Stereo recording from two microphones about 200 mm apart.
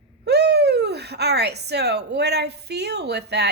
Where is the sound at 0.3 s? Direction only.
55° right (ahead or behind).